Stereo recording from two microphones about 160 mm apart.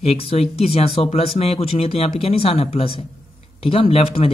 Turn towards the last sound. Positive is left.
turn(degrees=35)  # may be behind; listen again after turning